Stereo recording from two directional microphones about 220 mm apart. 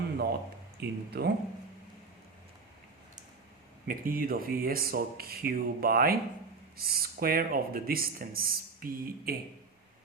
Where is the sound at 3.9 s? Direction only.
40° right (ahead or behind).